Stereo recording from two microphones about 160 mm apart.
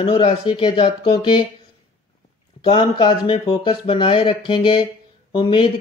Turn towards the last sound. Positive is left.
turn(degrees=35)  # may be behind; listen again after turning